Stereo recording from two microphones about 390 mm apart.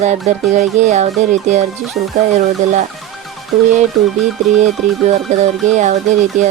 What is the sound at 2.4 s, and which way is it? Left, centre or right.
Speech, centre.